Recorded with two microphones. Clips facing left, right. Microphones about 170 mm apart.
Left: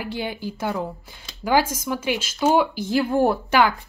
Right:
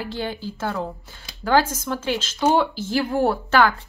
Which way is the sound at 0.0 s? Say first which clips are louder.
Even; 15° left (ahead or behind).